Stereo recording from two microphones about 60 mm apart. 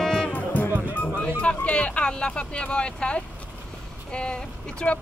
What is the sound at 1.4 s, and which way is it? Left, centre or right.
Speech, centre.